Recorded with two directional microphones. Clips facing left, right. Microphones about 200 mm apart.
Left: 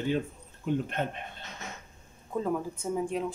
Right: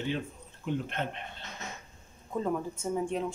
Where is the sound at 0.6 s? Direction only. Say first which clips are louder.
Left 3 dB; 50° left (ahead or behind).